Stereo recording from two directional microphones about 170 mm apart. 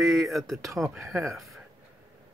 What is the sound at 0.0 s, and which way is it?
Speech, centre (ahead or behind).